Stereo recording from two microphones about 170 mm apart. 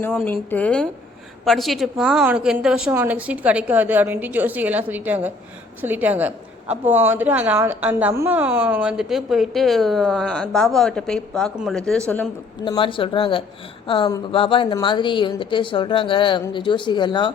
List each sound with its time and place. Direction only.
0.0 s a woman's voice: 5° left (ahead or behind)
12.6 s a woman's voice: 30° left (ahead or behind)